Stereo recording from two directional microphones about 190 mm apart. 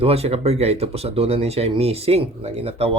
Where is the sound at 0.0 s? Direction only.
30° right (ahead or behind).